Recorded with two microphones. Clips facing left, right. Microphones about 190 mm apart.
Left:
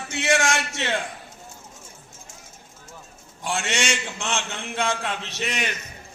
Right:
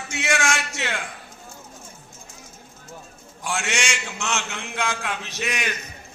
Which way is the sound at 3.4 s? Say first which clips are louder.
Left 1 dB; 25° left (ahead or behind).